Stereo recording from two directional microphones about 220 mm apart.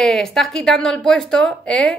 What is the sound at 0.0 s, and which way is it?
Speech, centre (ahead or behind).